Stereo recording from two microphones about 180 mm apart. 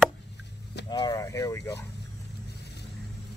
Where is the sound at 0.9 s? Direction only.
25° left (ahead or behind).